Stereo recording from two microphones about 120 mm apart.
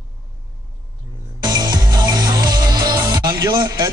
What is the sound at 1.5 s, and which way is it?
Music, 35° right (ahead or behind).